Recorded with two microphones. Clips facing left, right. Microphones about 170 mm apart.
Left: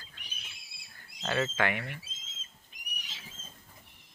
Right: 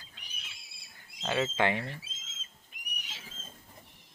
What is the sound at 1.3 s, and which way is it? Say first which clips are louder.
Speech: right 1 dB; 15° right (ahead or behind).